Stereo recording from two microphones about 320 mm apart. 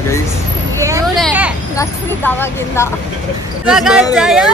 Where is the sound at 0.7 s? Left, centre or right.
Centre.